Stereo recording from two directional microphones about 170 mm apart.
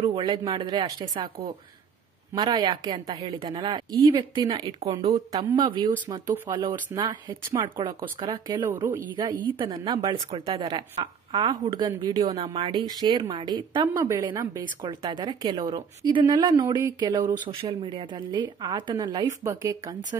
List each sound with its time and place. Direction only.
0.0 s a woman's voice: 25° right (ahead or behind)